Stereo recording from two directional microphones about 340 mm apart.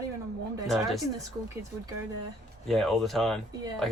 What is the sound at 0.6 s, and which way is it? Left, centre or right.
Speech, centre.